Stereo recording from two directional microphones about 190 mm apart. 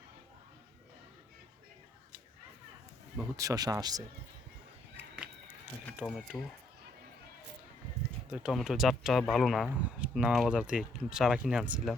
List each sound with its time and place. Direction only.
3.3 s speech: 20° right (ahead or behind)
4.9 s a sound: 5° right (ahead or behind)
6.0 s speech: centre (ahead or behind)
8.3 s speech: 5° right (ahead or behind)